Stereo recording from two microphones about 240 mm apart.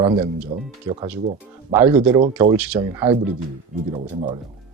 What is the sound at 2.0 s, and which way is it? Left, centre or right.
Speech, right.